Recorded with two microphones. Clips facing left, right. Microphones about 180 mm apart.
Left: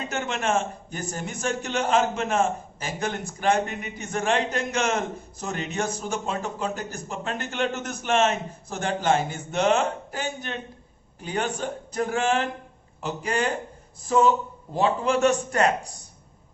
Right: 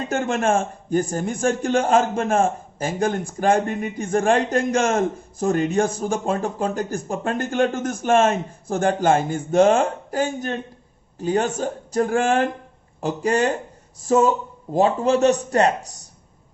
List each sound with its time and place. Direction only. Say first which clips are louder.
0.1 s a man's voice: right 6 dB; 50° right (ahead or behind)